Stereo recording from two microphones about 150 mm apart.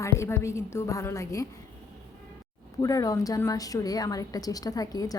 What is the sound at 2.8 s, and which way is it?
A woman's voice, 25° left (ahead or behind).